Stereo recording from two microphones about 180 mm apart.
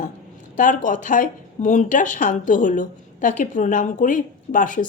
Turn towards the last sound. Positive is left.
turn(degrees=45)  # may be behind; listen again after turning